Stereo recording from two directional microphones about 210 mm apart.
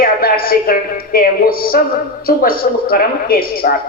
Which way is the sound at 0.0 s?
45° left (ahead or behind).